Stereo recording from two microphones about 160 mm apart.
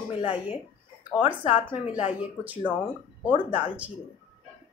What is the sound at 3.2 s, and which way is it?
Speech, 30° left (ahead or behind).